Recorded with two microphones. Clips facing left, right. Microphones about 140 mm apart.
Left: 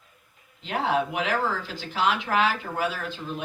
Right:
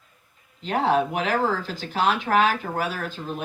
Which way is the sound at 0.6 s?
40° right (ahead or behind).